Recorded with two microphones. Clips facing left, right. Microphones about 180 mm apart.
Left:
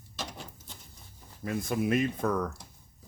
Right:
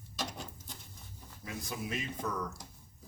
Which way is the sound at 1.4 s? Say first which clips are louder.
Left 11 dB; 55° left (ahead or behind).